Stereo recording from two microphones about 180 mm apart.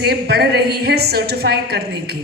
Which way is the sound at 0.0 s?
65° right (ahead or behind).